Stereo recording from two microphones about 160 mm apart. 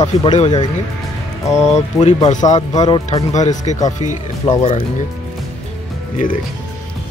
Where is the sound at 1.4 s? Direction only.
20° left (ahead or behind).